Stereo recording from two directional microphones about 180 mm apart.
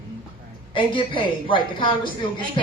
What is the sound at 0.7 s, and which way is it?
Speech, 30° left (ahead or behind).